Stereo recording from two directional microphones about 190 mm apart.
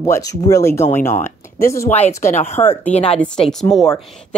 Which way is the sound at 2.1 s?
15° left (ahead or behind).